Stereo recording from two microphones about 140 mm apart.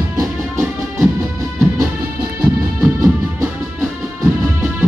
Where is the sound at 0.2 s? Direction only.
20° right (ahead or behind).